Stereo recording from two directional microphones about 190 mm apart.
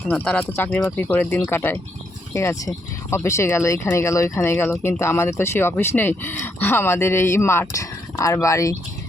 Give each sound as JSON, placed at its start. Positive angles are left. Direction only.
{"t": 0.1, "sound": "speech", "side_deg": 10}